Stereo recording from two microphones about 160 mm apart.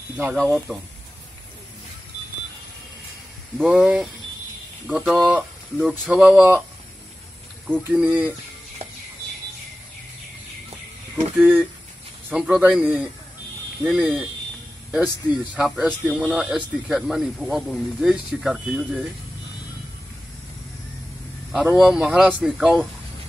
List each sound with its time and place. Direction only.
0.4 s speech: centre (ahead or behind)
3.5 s speech: centre (ahead or behind)
7.6 s speech: 5° right (ahead or behind)
11.1 s speech: 15° right (ahead or behind)
15.5 s speech: 5° right (ahead or behind)
21.5 s speech: centre (ahead or behind)